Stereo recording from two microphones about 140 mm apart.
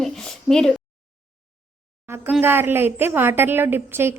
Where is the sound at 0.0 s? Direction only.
5° left (ahead or behind).